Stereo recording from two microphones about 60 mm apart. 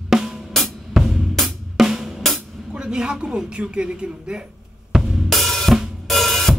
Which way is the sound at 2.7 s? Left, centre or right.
Centre.